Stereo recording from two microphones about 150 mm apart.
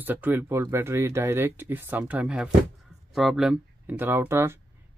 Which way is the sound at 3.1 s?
Centre (ahead or behind).